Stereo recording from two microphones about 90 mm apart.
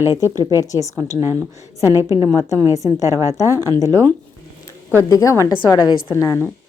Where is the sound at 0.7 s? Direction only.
35° left (ahead or behind).